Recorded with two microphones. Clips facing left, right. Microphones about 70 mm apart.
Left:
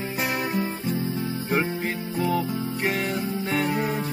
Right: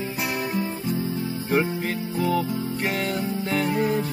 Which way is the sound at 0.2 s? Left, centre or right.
Left.